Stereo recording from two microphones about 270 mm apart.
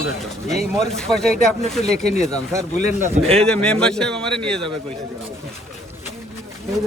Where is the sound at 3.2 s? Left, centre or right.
Centre.